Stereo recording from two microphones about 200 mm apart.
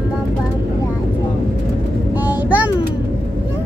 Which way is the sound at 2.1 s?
10° right (ahead or behind).